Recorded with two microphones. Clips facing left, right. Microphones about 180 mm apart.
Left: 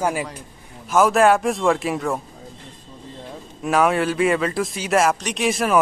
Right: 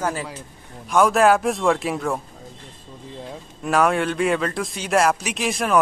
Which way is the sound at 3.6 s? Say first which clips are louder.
Left 1 dB; centre (ahead or behind).